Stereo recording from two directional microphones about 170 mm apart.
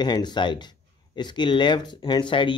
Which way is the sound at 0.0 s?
25° left (ahead or behind).